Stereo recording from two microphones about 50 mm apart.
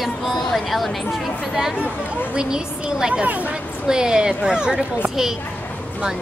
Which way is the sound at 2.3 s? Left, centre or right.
Centre.